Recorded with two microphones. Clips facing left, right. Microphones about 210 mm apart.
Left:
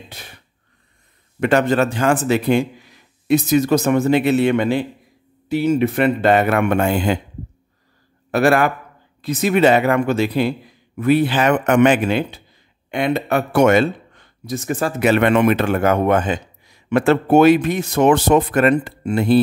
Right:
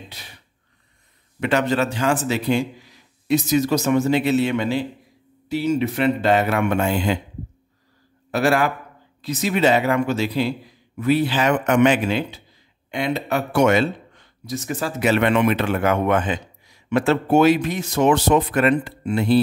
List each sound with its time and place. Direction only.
1.4 s a man's voice: 50° left (ahead or behind)
8.3 s a man's voice: 55° left (ahead or behind)